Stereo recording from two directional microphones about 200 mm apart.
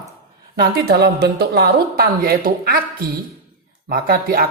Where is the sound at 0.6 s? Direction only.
55° right (ahead or behind).